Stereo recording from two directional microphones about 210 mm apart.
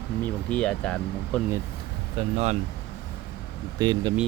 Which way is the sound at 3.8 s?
20° right (ahead or behind).